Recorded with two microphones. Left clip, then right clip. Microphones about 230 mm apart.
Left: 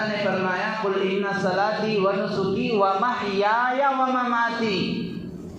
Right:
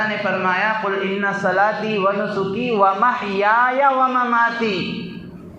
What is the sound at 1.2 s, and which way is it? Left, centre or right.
A man's voice, right.